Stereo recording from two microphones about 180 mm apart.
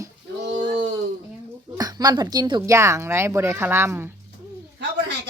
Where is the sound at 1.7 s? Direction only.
20° right (ahead or behind).